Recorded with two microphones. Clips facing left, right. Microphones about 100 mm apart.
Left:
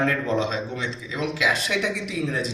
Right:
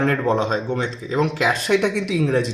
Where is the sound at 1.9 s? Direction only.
70° right (ahead or behind).